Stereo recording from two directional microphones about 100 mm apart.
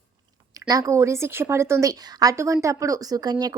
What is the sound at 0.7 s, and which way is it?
A woman's voice, 35° right (ahead or behind).